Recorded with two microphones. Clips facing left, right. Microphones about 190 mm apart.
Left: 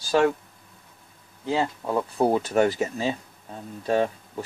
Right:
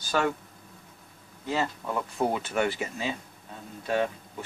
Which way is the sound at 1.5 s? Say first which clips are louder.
Left 4 dB; 30° left (ahead or behind).